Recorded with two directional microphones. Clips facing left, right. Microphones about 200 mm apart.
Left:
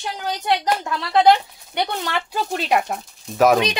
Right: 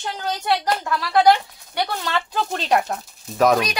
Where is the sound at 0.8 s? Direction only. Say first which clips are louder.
Even; 20° left (ahead or behind).